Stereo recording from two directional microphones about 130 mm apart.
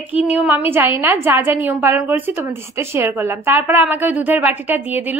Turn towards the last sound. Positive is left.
turn(degrees=-15)  # may be behind; listen again after turning